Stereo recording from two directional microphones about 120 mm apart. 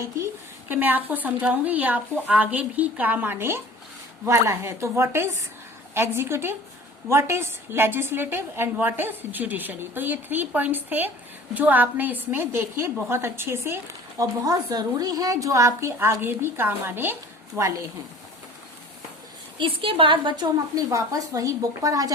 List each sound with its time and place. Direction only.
0.7 s a woman's voice: 15° right (ahead or behind)
14.2 s a woman's voice: 30° right (ahead or behind)
19.5 s a woman's voice: 45° right (ahead or behind)
20.9 s a woman's voice: 30° right (ahead or behind)